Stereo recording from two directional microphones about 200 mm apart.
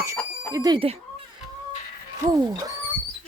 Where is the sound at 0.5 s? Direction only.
20° right (ahead or behind).